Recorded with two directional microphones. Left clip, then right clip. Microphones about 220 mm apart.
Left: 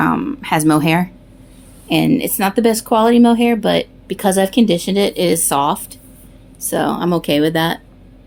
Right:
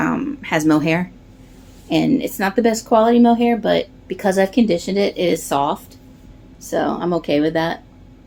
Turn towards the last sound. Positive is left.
turn(degrees=50)  # may be behind; listen again after turning